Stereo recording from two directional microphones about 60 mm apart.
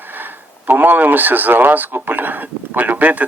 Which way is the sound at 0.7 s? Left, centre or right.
Right.